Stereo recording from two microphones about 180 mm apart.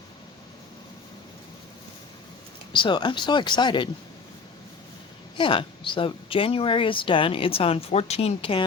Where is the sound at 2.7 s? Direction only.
25° left (ahead or behind).